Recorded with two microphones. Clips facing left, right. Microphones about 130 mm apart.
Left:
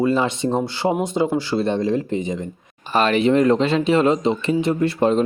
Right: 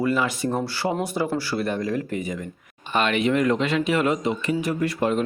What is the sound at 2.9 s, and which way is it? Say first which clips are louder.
Speech: left 5 dB; 35° left (ahead or behind).